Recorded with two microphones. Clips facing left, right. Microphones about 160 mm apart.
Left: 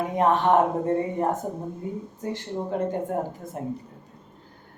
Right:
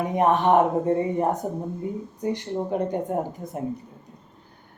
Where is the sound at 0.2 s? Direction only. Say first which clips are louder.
Right 1 dB; 15° right (ahead or behind).